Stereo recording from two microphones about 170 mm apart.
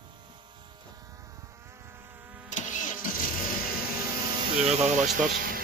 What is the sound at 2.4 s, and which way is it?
Vehicle, 45° left (ahead or behind).